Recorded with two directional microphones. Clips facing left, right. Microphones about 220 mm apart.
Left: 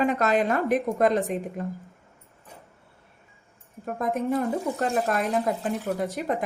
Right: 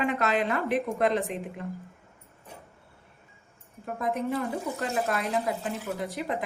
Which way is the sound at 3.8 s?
45° left (ahead or behind).